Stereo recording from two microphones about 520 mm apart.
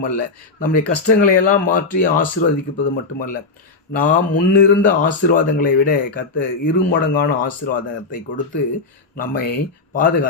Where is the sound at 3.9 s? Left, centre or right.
Centre.